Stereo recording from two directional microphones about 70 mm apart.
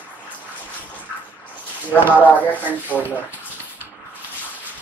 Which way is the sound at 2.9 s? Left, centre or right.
Right.